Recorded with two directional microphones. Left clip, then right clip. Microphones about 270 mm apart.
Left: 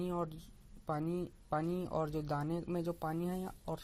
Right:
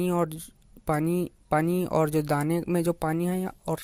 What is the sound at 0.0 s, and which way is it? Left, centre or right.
Speech, right.